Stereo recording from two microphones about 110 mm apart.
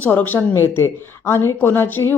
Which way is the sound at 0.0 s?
15° left (ahead or behind).